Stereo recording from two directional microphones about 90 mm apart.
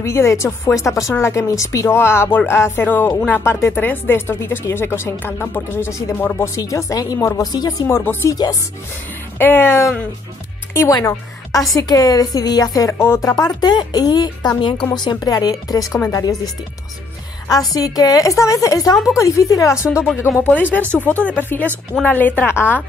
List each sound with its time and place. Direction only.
0.0 s a woman's voice: 30° left (ahead or behind)
7.5 s a woman's voice: 50° left (ahead or behind)
8.0 s speech: 25° left (ahead or behind)
8.3 s a woman's voice: 40° left (ahead or behind)
9.4 s a woman's voice: 25° left (ahead or behind); by 14.9 s 60° left (ahead or behind)
14.9 s a woman's voice: 50° left (ahead or behind)
17.7 s a woman's voice: 45° left (ahead or behind)
20.4 s speech: 15° left (ahead or behind)